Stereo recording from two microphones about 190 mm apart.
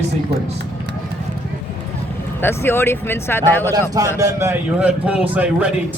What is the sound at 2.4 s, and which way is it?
Speech, 10° left (ahead or behind).